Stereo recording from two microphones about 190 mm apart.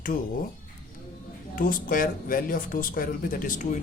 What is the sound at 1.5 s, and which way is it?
Speech, 45° left (ahead or behind).